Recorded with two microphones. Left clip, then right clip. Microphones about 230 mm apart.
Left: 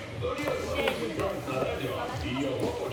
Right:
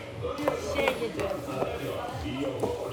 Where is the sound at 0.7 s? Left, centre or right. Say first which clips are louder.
Right 1 dB; centre.